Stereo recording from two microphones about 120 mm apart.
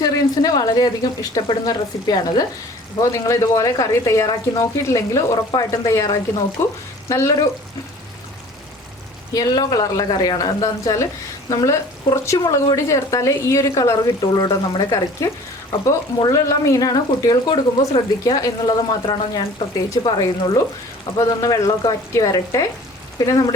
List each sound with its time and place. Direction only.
0.0 s a woman's voice: 30° left (ahead or behind)
9.3 s a woman's voice: 30° left (ahead or behind)
19.9 s a woman's voice: 30° left (ahead or behind)